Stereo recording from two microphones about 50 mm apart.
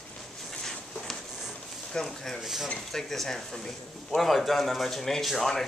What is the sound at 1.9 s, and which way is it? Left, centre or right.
Speech, centre.